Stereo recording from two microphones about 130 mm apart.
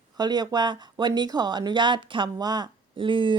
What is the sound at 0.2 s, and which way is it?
Speech, 35° right (ahead or behind).